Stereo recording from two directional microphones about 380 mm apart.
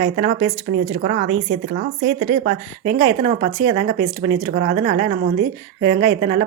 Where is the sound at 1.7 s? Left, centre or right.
Right.